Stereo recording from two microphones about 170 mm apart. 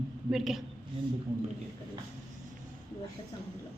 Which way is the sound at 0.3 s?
Centre (ahead or behind).